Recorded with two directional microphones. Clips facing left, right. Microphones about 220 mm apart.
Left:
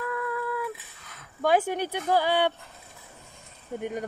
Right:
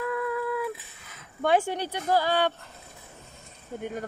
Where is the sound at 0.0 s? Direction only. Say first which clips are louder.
Right 2 dB; 25° right (ahead or behind).